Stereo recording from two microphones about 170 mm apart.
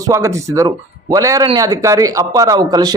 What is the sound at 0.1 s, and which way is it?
Speech, 20° right (ahead or behind).